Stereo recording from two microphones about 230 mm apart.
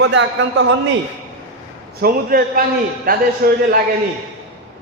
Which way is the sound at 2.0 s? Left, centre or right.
Right.